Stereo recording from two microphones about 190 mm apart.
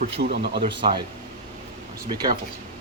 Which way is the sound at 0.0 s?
60° right (ahead or behind).